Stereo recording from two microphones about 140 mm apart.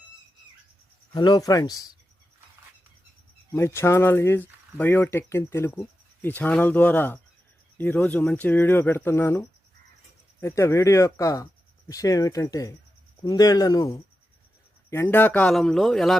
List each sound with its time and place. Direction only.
1.1 s speech: 30° left (ahead or behind)
3.5 s speech: 20° left (ahead or behind); by 16.1 s centre (ahead or behind)